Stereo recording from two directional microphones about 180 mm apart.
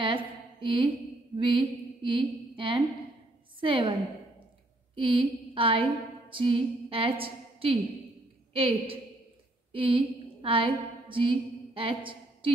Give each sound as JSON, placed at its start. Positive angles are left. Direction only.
{"t": 0.0, "sound": "a sound", "side_deg": -30}
{"t": 3.6, "sound": "a woman's voice", "side_deg": -30}
{"t": 4.9, "sound": "a woman's voice", "side_deg": -30}